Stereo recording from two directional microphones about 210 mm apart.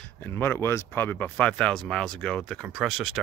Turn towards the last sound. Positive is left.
turn(degrees=0)  # may be behind; listen again after turning